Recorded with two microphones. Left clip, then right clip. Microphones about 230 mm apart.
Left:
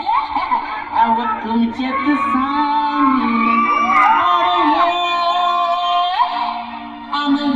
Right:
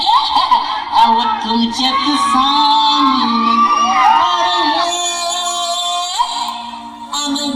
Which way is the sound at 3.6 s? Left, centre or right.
Right.